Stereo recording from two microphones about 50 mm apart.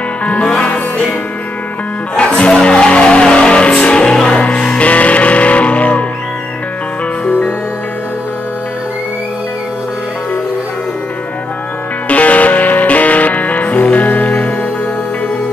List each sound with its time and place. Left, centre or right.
0.2 s music: left
2.1 s music: left
12.1 s music: left